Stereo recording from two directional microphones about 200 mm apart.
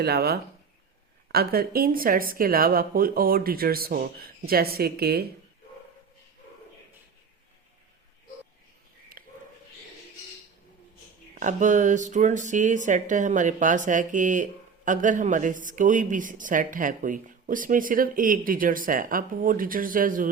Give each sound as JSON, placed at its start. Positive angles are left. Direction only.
{"t": 0.0, "sound": "speech", "side_deg": -55}
{"t": 9.1, "sound": "a sound", "side_deg": -45}
{"t": 11.3, "sound": "speech", "side_deg": -40}